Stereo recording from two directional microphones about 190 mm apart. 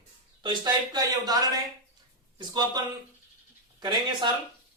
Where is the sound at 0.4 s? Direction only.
20° right (ahead or behind).